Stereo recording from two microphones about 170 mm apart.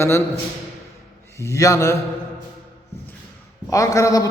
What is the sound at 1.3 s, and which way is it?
Speech, 15° left (ahead or behind).